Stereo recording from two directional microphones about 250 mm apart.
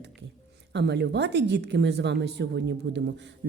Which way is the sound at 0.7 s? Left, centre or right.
Right.